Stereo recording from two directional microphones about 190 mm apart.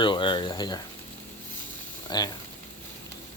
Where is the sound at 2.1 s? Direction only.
20° left (ahead or behind).